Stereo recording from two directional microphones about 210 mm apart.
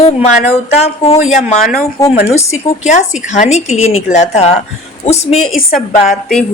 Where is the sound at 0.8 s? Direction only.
30° left (ahead or behind).